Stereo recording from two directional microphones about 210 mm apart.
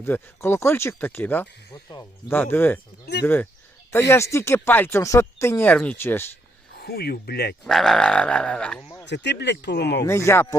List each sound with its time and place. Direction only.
0.0 s speech: 10° left (ahead or behind)
3.1 s speech: 50° left (ahead or behind)
4.1 s speech: 15° left (ahead or behind)
6.8 s speech: 50° left (ahead or behind)
7.6 s speech: centre (ahead or behind)
9.0 s speech: 55° left (ahead or behind)
10.0 s speech: 15° left (ahead or behind)